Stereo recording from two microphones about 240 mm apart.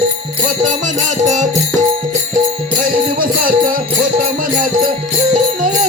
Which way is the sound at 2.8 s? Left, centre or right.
Right.